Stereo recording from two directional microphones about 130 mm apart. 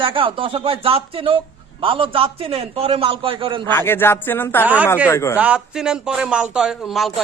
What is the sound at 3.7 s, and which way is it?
A man's voice, 15° left (ahead or behind).